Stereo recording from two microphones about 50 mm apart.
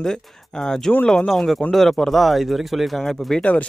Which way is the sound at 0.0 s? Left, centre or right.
Centre.